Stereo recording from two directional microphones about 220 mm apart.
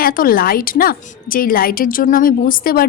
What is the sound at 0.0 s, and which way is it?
A woman's voice, 40° left (ahead or behind).